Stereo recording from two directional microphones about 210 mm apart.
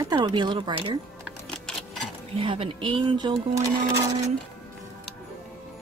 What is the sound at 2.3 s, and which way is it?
Speech, 25° right (ahead or behind).